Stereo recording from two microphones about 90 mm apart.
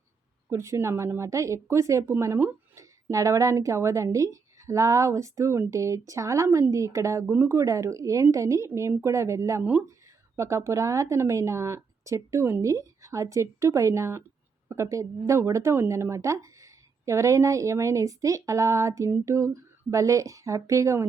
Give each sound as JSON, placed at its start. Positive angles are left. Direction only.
{"t": 0.5, "sound": "speech", "side_deg": -35}